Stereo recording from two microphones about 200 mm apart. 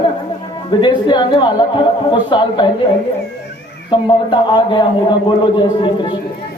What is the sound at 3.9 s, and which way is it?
Speech, 25° left (ahead or behind).